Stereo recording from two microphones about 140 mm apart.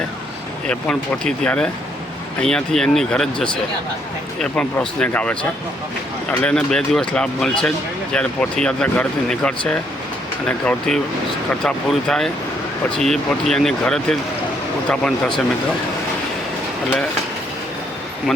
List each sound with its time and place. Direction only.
0.7 s speech: 5° left (ahead or behind)
6.4 s speech: 5° left (ahead or behind)